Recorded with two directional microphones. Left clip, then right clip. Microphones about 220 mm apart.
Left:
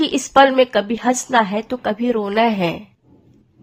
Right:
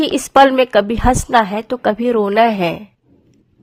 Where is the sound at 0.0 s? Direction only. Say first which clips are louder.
Right 2 dB; 30° right (ahead or behind).